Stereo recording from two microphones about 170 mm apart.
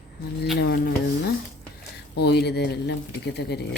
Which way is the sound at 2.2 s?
75° left (ahead or behind).